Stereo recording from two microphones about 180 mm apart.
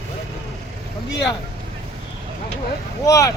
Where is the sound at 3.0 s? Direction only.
20° left (ahead or behind).